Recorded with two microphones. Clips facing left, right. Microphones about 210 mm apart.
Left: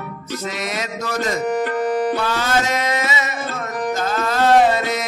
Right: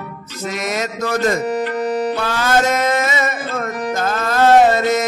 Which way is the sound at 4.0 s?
50° right (ahead or behind).